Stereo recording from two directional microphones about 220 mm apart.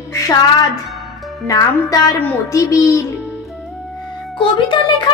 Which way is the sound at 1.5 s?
10° left (ahead or behind).